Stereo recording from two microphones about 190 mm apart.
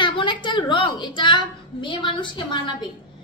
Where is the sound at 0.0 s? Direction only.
25° left (ahead or behind).